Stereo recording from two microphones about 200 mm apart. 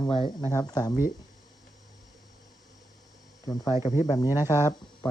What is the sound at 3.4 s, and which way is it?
Speech, 20° left (ahead or behind).